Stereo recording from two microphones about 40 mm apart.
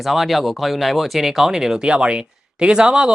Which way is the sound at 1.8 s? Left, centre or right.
Right.